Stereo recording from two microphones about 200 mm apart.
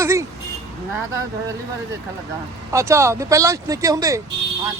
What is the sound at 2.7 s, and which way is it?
Speech, 15° right (ahead or behind).